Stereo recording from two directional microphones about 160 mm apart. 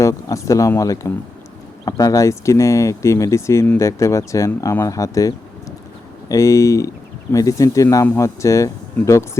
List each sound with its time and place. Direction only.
0.0 s speech: 20° left (ahead or behind)